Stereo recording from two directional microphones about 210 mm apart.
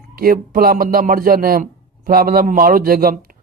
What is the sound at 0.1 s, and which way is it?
Speech, 45° right (ahead or behind).